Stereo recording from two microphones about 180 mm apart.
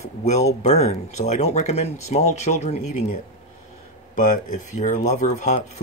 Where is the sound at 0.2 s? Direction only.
35° left (ahead or behind).